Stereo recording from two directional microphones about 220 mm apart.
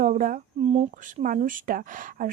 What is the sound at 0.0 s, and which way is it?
Speech, 40° right (ahead or behind).